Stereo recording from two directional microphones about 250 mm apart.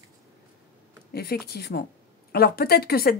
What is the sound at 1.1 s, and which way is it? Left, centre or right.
A woman's voice, left.